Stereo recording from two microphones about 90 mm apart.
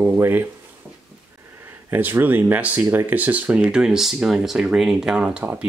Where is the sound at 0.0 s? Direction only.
20° right (ahead or behind).